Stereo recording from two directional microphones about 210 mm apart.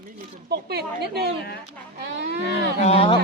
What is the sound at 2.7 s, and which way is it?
Speech, 30° left (ahead or behind).